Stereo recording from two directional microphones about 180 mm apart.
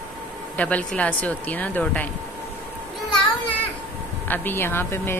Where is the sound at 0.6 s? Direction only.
5° left (ahead or behind).